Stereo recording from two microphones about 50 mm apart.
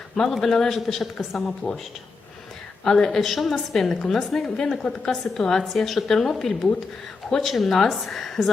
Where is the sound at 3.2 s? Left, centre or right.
Centre.